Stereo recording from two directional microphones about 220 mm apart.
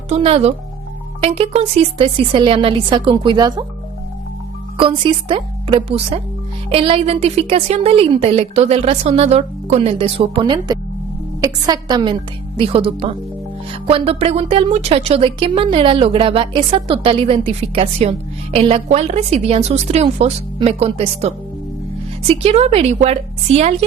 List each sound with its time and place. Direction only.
0.1 s speech: 25° right (ahead or behind)
4.8 s speech: 25° right (ahead or behind)